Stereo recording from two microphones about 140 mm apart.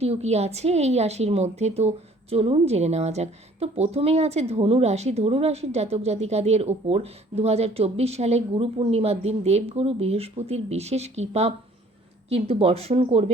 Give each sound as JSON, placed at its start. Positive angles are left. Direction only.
{"t": 0.0, "sound": "a woman's voice", "side_deg": -50}